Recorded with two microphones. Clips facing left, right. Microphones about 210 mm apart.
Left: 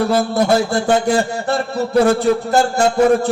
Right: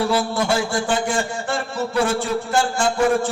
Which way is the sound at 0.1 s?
40° left (ahead or behind).